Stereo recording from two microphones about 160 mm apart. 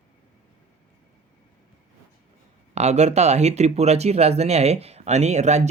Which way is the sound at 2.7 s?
45° right (ahead or behind).